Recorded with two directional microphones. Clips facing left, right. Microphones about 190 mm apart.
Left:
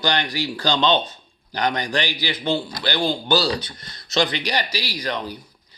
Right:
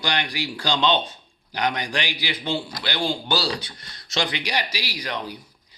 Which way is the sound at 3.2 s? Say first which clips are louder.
Left 5 dB; 10° right (ahead or behind).